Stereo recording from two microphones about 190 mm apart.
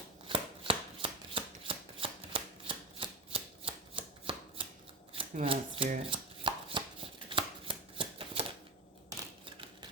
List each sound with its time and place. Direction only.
0.3 s shuffling cards: 25° right (ahead or behind)
5.3 s speech: 35° right (ahead or behind)
5.9 s chopping: 30° right (ahead or behind)
7.3 s shuffling cards: 25° right (ahead or behind)